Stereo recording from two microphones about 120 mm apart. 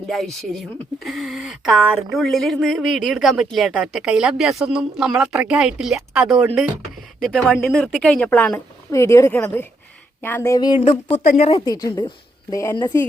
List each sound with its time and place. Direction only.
0.1 s a woman's voice: centre (ahead or behind)
8.9 s a woman's voice: 25° left (ahead or behind)
10.5 s a woman's voice: 35° left (ahead or behind)
11.3 s speech: 60° left (ahead or behind)
11.6 s a woman's voice: 30° left (ahead or behind)